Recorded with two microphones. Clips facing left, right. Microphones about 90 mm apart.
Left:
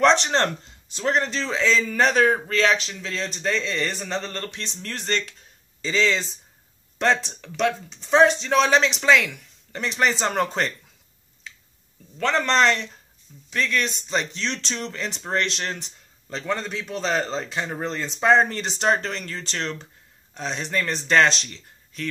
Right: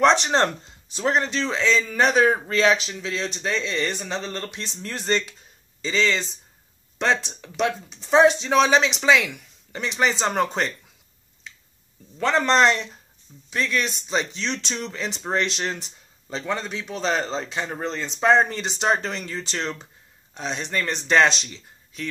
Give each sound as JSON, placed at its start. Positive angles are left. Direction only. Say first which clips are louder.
{"t": 0.0, "sound": "a man's voice", "louder": "right 1 dB", "side_deg": -5}
{"t": 2.4, "sound": "speech", "louder": "right 1 dB", "side_deg": -15}
{"t": 5.8, "sound": "speech", "louder": "even", "side_deg": 0}
{"t": 12.2, "sound": "a man's voice", "louder": "right 2 dB", "side_deg": -15}